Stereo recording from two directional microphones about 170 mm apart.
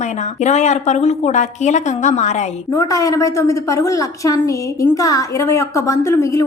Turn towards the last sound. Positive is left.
turn(degrees=15)  # may be behind; listen again after turning